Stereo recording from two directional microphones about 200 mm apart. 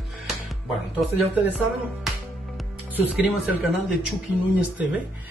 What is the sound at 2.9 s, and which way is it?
Speech, 10° right (ahead or behind).